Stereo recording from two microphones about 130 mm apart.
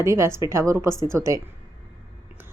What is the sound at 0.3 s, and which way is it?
Speech, 35° left (ahead or behind).